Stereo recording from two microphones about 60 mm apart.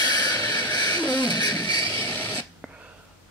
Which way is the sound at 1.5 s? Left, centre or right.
Left.